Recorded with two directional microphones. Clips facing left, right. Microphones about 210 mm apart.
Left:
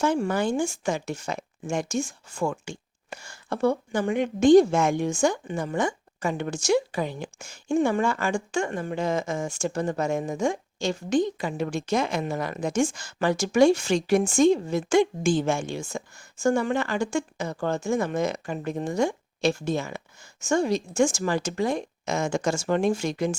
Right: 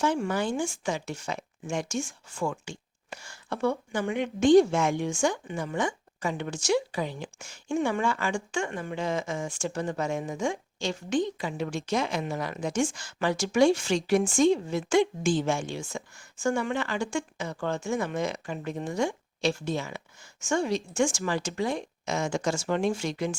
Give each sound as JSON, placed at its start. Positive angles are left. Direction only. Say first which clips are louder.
{"t": 0.0, "sound": "speech", "louder": "left 3 dB", "side_deg": 45}